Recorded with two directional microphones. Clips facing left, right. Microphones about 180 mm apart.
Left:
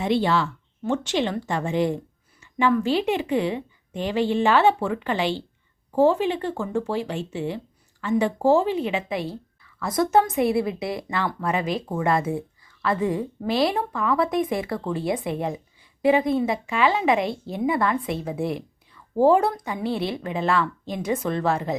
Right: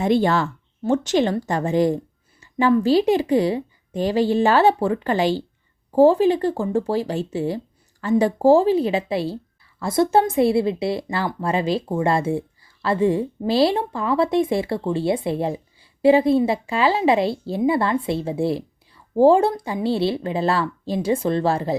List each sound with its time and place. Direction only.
0.0 s a woman's voice: 45° right (ahead or behind)